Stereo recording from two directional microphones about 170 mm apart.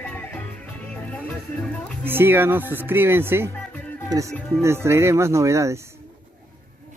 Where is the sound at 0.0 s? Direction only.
10° left (ahead or behind).